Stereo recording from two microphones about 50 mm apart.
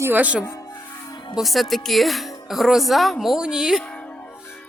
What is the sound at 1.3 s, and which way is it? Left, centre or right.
Speech, centre.